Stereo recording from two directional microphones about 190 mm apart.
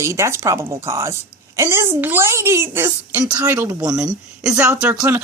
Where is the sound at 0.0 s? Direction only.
15° right (ahead or behind).